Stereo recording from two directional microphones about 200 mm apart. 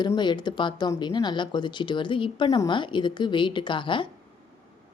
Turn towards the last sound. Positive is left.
turn(degrees=25)  # may be behind; listen again after turning